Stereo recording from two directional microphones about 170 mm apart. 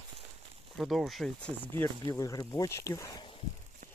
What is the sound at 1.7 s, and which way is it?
Speech, 15° left (ahead or behind).